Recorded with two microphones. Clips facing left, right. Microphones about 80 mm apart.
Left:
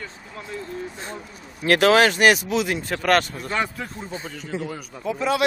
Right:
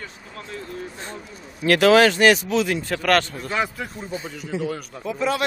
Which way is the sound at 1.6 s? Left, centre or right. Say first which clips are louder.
Right 2 dB; left.